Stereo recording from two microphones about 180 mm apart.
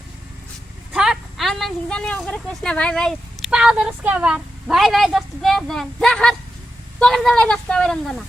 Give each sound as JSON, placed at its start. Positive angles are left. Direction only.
{"t": 0.9, "sound": "speech", "side_deg": -5}